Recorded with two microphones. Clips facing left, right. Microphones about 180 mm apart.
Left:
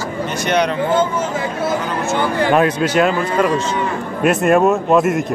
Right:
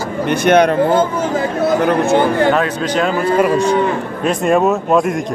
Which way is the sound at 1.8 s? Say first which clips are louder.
Right 7 dB; 60° right (ahead or behind).